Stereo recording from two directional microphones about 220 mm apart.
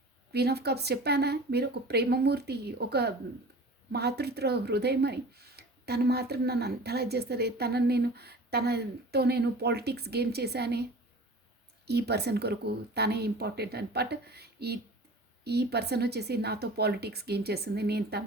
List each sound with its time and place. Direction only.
0.3 s speech: 45° right (ahead or behind)
11.9 s speech: 50° right (ahead or behind)